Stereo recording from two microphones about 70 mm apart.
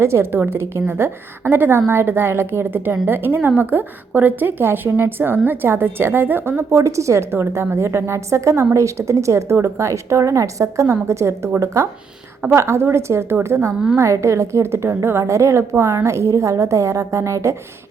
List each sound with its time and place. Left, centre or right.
0.0 s a woman's voice: right
12.5 s a woman's voice: right